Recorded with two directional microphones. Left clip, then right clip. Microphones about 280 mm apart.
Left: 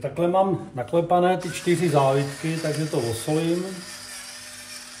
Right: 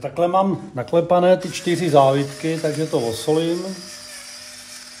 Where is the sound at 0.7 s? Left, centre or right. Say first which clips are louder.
Right 7 dB; right.